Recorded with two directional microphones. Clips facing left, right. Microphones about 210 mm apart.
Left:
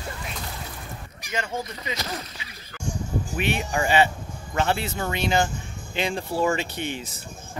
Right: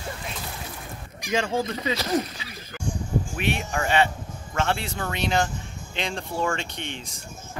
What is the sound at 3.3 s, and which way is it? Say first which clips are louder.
A man's voice: left 1 dB; centre (ahead or behind).